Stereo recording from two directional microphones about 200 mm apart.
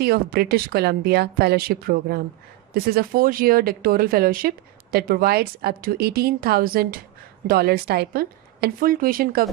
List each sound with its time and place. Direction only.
0.0 s speech: 50° right (ahead or behind)